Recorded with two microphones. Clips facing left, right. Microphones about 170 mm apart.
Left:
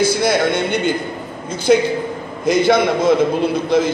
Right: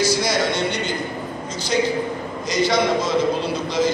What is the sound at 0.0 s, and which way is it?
A man's voice, 55° left (ahead or behind).